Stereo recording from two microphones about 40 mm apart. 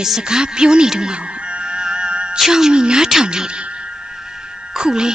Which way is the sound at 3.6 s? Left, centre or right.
Right.